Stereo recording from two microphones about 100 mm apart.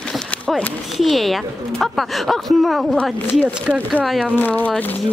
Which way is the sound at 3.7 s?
10° right (ahead or behind).